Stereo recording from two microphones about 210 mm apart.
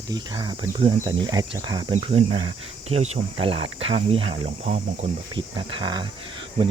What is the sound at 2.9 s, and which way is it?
Speech, 30° right (ahead or behind).